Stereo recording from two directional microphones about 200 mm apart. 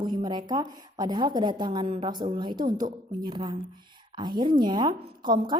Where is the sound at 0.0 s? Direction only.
20° right (ahead or behind).